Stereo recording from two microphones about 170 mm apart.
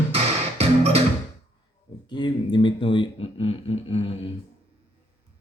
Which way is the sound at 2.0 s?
25° left (ahead or behind).